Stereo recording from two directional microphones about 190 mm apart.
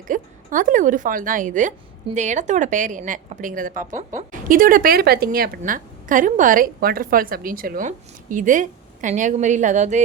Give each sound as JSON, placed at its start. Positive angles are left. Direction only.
{"t": 0.1, "sound": "a woman's voice", "side_deg": -45}